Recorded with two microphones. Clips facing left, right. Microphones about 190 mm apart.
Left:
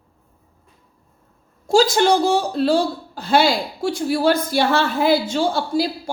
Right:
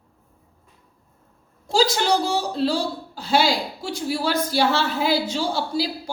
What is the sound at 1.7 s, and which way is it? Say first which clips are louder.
Speech: left 5 dB; 50° left (ahead or behind).